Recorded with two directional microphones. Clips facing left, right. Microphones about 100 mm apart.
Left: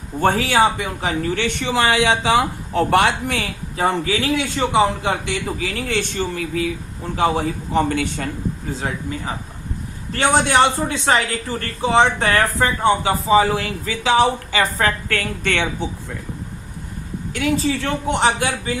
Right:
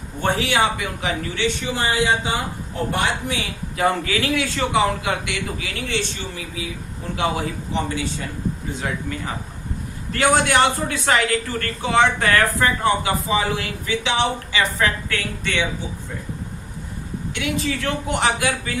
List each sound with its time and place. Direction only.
0.2 s a man's voice: 40° left (ahead or behind)
1.4 s speech: 55° left (ahead or behind)
1.6 s speech: 90° left; by 3.4 s 60° left (ahead or behind)
3.8 s a man's voice: 25° left (ahead or behind); by 6.7 s 50° left (ahead or behind)
7.2 s a man's voice: 35° left (ahead or behind)
7.9 s speech: 55° left (ahead or behind)
10.1 s a man's voice: 30° left (ahead or behind); by 15.6 s 50° left (ahead or behind)
17.3 s a man's voice: 35° left (ahead or behind)